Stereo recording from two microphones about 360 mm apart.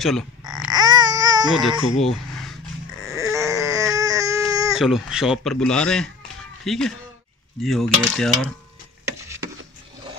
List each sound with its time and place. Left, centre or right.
0.4 s baby cry: centre
3.1 s baby cry: centre
6.6 s speech: centre
7.6 s mechanisms: centre
9.0 s a sound: centre